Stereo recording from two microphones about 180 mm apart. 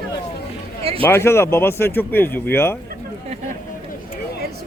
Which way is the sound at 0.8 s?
35° right (ahead or behind).